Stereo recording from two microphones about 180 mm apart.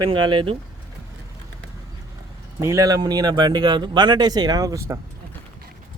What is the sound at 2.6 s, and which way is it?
Speech, 20° right (ahead or behind).